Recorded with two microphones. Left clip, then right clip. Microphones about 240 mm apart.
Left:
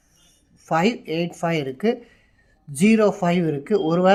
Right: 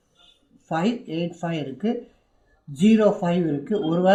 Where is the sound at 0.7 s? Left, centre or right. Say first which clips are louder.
Left 5 dB; left.